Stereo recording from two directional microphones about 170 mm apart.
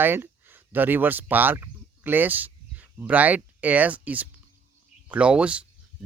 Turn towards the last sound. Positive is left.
turn(degrees=-5)  # may be behind; listen again after turning